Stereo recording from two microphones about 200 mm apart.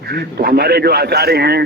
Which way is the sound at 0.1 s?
50° right (ahead or behind).